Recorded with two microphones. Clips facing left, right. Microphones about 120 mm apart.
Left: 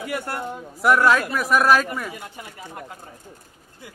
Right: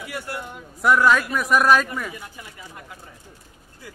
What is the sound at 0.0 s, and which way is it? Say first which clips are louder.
Speech: left 4 dB; 50° left (ahead or behind).